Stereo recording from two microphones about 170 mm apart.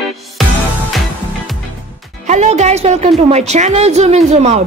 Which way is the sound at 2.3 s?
40° right (ahead or behind).